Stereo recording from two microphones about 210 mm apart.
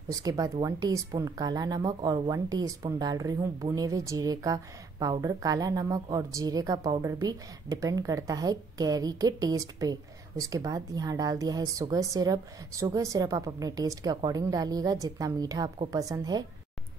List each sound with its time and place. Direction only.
0.1 s speech: 15° right (ahead or behind)